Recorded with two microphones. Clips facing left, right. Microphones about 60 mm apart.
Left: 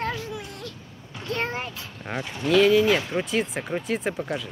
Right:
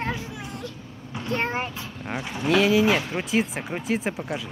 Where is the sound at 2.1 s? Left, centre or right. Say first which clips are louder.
Left 1 dB; centre.